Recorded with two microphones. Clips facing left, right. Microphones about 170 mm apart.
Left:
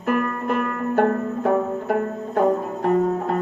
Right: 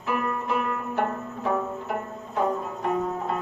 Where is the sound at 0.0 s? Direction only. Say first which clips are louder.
Left 5 dB; 60° left (ahead or behind).